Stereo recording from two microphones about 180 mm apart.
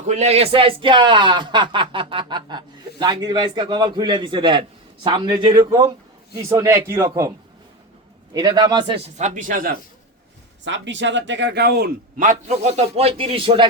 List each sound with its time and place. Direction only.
0.0 s a man's voice: 40° right (ahead or behind)
9.1 s speech: 45° right (ahead or behind)
10.6 s speech: 90° right; by 13.7 s 30° right (ahead or behind)